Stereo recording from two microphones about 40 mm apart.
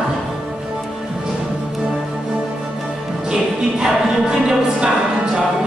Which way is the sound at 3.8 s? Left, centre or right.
Centre.